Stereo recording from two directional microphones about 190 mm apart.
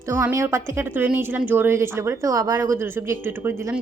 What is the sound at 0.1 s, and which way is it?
A woman's voice, 15° right (ahead or behind).